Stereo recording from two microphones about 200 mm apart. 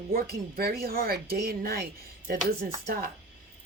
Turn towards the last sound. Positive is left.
turn(degrees=-50)  # may be behind; listen again after turning